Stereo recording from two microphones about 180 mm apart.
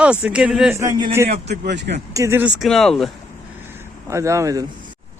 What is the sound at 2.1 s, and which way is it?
Speech, 15° right (ahead or behind).